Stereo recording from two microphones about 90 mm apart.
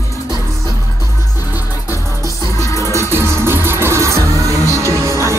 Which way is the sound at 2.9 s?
30° right (ahead or behind).